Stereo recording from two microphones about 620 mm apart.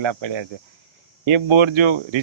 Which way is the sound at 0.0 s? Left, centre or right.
Right.